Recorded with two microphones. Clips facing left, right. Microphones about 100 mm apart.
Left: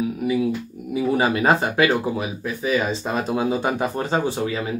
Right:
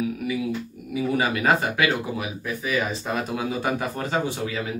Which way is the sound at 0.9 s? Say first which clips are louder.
Left 4 dB; 30° left (ahead or behind).